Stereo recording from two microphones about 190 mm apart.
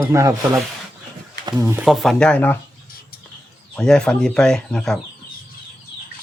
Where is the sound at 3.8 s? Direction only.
5° left (ahead or behind).